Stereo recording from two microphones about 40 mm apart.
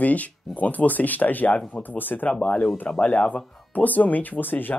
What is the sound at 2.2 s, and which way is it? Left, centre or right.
Speech, left.